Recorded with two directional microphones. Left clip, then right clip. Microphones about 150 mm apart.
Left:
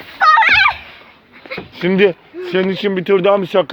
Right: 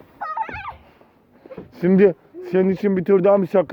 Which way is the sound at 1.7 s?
90° right.